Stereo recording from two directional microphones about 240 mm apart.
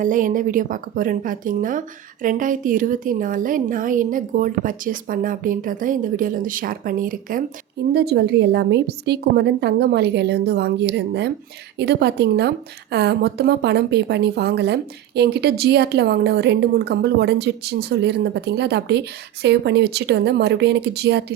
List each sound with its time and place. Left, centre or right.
0.0 s a woman's voice: right